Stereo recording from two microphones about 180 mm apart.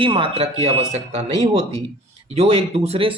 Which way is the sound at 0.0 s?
30° right (ahead or behind).